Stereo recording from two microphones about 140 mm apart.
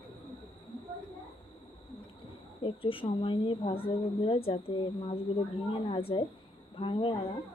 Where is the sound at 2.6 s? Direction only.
40° left (ahead or behind).